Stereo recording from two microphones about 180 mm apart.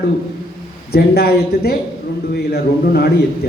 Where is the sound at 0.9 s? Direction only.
60° left (ahead or behind).